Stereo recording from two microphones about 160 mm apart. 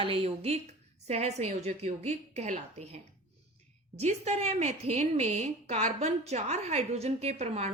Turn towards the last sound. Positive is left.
turn(degrees=-40)  # may be behind; listen again after turning